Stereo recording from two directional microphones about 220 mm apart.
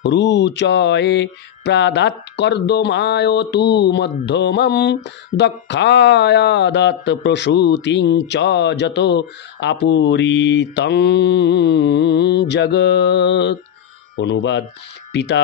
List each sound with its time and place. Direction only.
0.0 s mantra: 50° left (ahead or behind)